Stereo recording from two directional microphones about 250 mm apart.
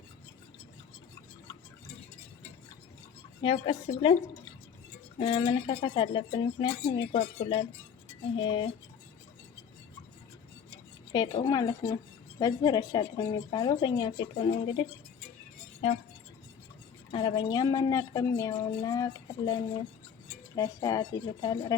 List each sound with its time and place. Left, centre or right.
3.4 s speech: left
5.2 s speech: left
11.1 s speech: centre
17.1 s speech: centre